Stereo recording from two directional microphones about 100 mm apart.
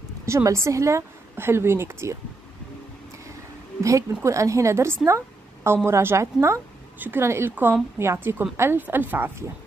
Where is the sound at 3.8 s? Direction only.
30° right (ahead or behind).